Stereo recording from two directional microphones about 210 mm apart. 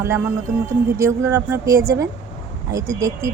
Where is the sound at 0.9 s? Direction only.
10° right (ahead or behind).